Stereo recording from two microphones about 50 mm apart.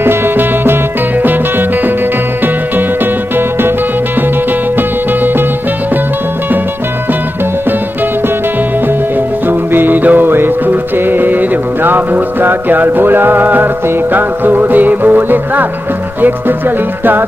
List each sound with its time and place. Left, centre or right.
0.0 s music: right
9.5 s music: right